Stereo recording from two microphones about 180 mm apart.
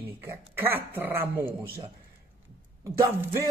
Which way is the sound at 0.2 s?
10° right (ahead or behind).